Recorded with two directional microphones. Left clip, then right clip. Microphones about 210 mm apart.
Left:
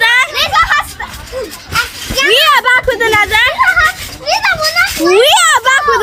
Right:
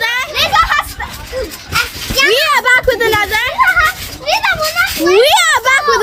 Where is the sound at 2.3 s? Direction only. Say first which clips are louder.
Left 5 dB; centre (ahead or behind).